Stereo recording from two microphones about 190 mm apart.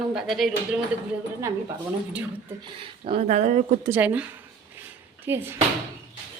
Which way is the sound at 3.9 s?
10° right (ahead or behind).